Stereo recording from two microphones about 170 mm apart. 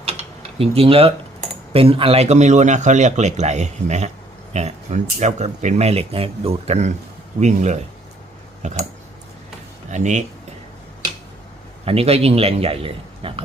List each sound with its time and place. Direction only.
0.0 s speech: 35° right (ahead or behind)
9.9 s speech: 45° right (ahead or behind)
11.9 s speech: 35° right (ahead or behind)